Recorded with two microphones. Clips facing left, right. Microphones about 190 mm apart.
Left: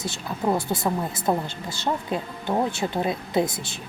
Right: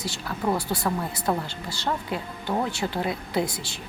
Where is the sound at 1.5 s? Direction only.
50° left (ahead or behind).